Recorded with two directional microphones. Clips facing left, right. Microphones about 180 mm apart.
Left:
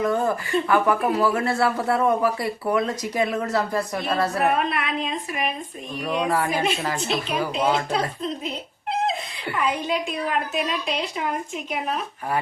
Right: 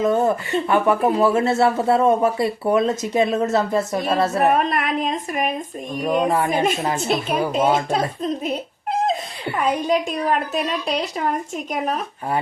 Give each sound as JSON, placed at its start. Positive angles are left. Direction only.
{"t": 0.0, "sound": "speech", "side_deg": -20}
{"t": 4.5, "sound": "speech", "side_deg": -45}
{"t": 6.2, "sound": "speech", "side_deg": -25}
{"t": 6.5, "sound": "speech", "side_deg": -50}
{"t": 8.4, "sound": "dog", "side_deg": -45}
{"t": 9.6, "sound": "a woman's voice", "side_deg": -45}